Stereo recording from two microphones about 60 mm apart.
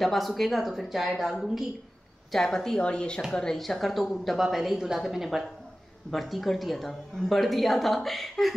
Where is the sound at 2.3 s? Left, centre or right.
Centre.